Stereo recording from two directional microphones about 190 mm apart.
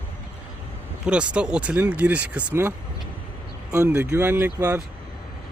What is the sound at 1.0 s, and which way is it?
Speech, 5° right (ahead or behind).